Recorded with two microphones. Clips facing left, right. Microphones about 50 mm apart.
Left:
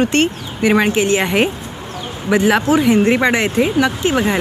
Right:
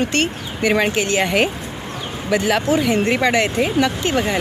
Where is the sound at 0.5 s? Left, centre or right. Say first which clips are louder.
Left 3 dB; centre.